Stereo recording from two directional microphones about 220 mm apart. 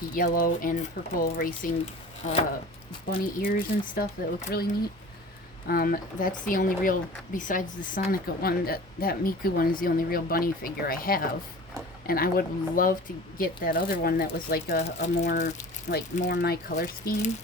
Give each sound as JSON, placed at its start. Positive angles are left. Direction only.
{"t": 0.1, "sound": "speech", "side_deg": 40}
{"t": 3.4, "sound": "speech", "side_deg": 40}
{"t": 5.6, "sound": "speech", "side_deg": 40}
{"t": 14.8, "sound": "speech", "side_deg": 30}